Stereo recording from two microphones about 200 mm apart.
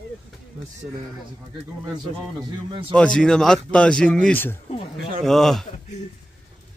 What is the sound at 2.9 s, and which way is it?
Speech, 5° left (ahead or behind).